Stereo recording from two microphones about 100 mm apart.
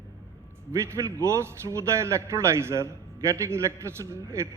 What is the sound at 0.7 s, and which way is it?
A man's voice, 25° right (ahead or behind).